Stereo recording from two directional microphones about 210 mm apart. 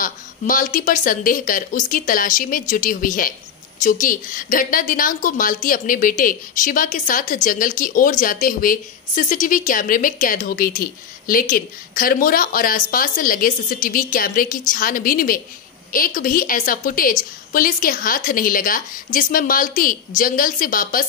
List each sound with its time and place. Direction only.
0.0 s a woman's voice: 40° left (ahead or behind)